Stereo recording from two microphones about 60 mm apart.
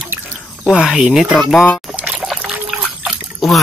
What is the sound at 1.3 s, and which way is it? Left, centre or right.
Speech, centre.